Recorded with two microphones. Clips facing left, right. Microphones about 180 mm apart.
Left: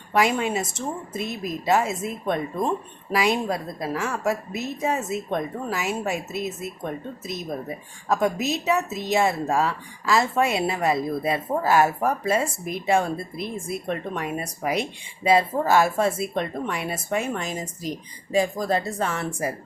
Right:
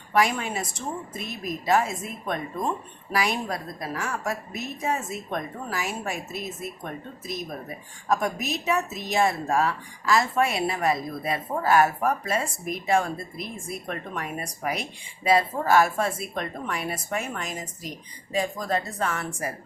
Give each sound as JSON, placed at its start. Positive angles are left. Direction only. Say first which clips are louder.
{"t": 0.1, "sound": "speech", "louder": "left 2 dB", "side_deg": 25}
{"t": 8.1, "sound": "speech", "louder": "left 3 dB", "side_deg": 25}